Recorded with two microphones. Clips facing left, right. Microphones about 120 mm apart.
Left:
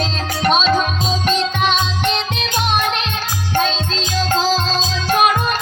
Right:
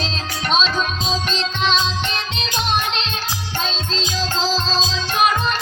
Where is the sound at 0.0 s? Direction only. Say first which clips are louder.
Left 7 dB; 50° left (ahead or behind).